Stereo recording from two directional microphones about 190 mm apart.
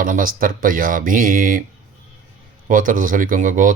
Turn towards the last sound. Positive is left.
turn(degrees=-45)  # may be behind; listen again after turning